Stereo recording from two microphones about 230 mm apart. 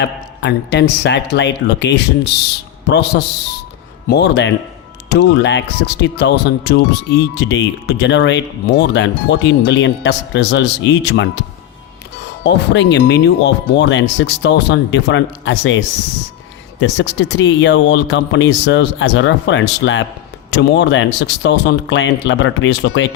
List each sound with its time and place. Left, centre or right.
0.0 s speech: left
12.5 s speech: left
16.8 s speech: left